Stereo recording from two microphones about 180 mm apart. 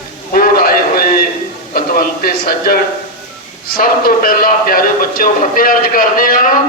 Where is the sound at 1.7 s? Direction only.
55° left (ahead or behind).